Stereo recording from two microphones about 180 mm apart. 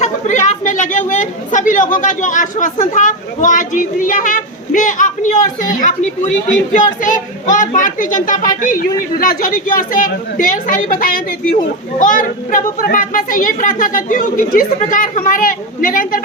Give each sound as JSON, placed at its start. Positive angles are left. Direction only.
{"t": 0.0, "sound": "a woman's voice", "side_deg": 40}